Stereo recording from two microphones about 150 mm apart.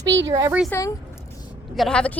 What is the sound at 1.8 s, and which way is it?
Speech, 5° left (ahead or behind).